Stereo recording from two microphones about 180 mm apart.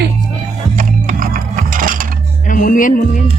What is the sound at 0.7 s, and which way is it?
Music, 50° right (ahead or behind).